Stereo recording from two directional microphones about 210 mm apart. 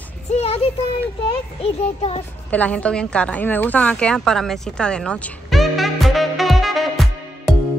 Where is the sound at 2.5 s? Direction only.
5° left (ahead or behind).